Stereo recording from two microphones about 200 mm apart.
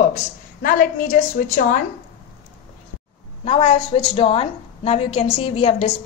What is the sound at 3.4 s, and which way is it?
A woman's voice, 30° left (ahead or behind).